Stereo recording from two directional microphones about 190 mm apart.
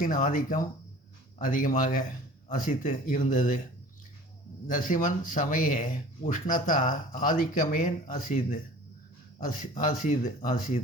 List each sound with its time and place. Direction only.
0.0 s speech: 45° left (ahead or behind)
4.7 s speech: 45° left (ahead or behind)